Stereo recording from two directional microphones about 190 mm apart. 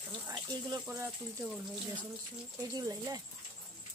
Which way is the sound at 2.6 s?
20° right (ahead or behind).